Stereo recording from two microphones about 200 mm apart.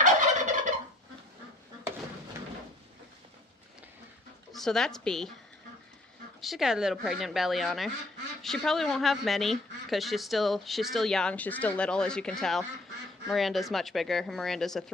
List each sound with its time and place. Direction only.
0.0 s fowl: 40° right (ahead or behind)
4.5 s a woman's voice: centre (ahead or behind)
6.4 s speech: centre (ahead or behind)